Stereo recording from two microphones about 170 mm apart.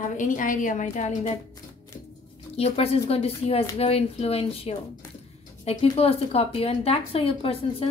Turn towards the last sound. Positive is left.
turn(degrees=35)  # may be behind; listen again after turning